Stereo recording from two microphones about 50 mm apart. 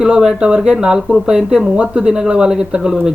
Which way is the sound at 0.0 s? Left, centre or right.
Centre.